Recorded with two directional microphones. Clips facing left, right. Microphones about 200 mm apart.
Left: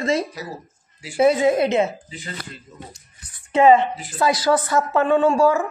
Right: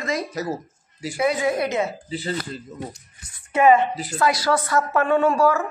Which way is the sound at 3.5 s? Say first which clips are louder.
Left 2 dB; 25° left (ahead or behind).